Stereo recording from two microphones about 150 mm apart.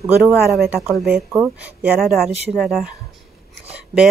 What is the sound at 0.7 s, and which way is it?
A woman's voice, 5° right (ahead or behind).